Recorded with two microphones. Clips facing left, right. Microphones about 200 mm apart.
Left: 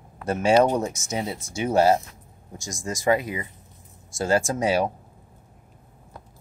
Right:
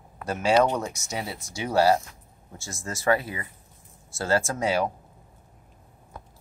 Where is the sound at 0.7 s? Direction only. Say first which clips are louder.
Left 4 dB; 25° left (ahead or behind).